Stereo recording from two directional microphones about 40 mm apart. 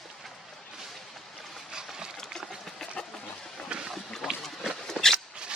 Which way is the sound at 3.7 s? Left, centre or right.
Right.